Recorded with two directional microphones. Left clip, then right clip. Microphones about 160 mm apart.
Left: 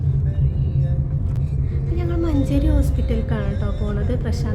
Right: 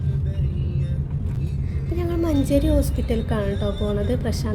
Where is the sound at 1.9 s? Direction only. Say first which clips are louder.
Right 1 dB; 20° right (ahead or behind).